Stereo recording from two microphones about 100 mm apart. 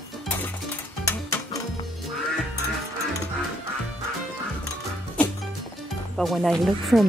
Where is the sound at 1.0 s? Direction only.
30° left (ahead or behind).